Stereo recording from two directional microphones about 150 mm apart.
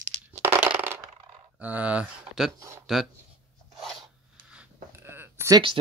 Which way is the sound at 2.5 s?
20° right (ahead or behind).